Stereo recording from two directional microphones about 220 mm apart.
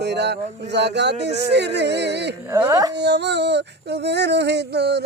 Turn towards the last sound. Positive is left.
turn(degrees=-50)  # may be behind; listen again after turning